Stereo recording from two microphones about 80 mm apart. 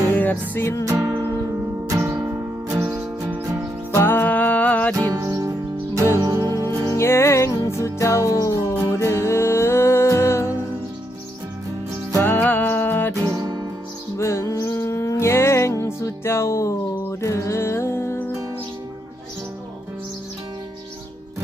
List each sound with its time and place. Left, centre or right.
0.0 s music: left
0.9 s music: right
3.9 s music: left
4.9 s music: right
6.9 s music: left
8.7 s music: left
12.2 s music: left
14.2 s music: left